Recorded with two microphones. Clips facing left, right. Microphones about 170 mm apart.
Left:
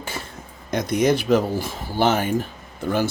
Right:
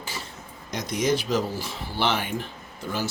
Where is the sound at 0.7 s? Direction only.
55° left (ahead or behind).